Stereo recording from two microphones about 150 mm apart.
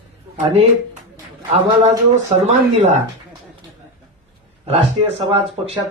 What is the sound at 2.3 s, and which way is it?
Speech, 50° right (ahead or behind).